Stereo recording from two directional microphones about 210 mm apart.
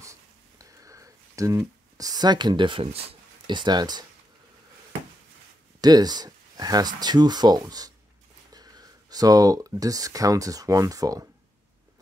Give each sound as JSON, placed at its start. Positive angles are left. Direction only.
{"t": 0.0, "sound": "a sound", "side_deg": -15}
{"t": 2.0, "sound": "speech", "side_deg": -20}
{"t": 5.8, "sound": "speech", "side_deg": -20}